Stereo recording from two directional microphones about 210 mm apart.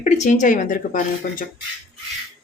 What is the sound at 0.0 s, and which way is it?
Speech, 35° left (ahead or behind).